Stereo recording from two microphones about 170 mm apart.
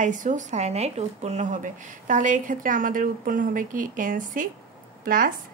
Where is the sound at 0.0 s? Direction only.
50° right (ahead or behind).